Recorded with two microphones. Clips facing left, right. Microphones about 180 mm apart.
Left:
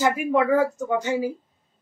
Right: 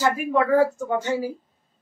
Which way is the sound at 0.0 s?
15° left (ahead or behind).